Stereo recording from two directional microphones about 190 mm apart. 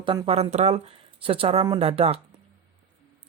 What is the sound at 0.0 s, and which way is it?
Speech, 25° right (ahead or behind).